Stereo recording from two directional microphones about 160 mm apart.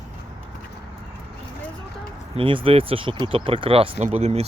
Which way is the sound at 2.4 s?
35° right (ahead or behind).